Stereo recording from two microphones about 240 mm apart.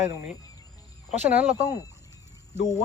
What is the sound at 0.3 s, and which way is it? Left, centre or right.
Cricket, centre.